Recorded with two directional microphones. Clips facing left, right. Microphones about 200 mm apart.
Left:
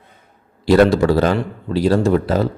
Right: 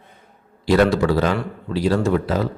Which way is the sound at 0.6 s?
35° left (ahead or behind).